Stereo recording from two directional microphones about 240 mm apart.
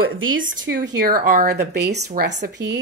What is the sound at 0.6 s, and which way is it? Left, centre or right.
Speech, right.